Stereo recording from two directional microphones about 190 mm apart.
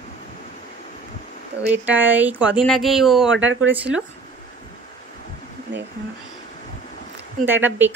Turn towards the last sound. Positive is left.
turn(degrees=-10)  # may be behind; listen again after turning